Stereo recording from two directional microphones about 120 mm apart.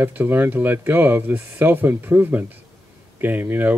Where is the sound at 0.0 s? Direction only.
15° right (ahead or behind).